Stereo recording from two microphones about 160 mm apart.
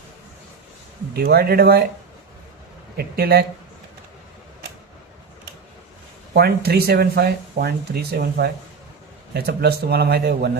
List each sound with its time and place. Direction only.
1.1 s speech: 80° right
3.0 s speech: 75° right (ahead or behind)
6.3 s a man's voice: 75° right (ahead or behind)